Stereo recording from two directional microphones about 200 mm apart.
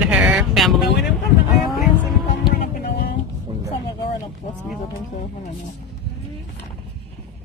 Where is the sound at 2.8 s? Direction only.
45° left (ahead or behind).